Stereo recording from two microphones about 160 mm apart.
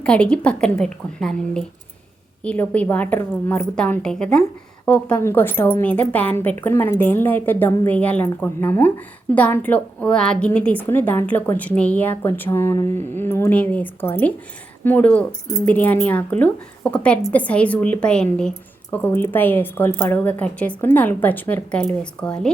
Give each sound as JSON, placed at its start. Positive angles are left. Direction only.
{"t": 0.0, "sound": "a woman's voice", "side_deg": 5}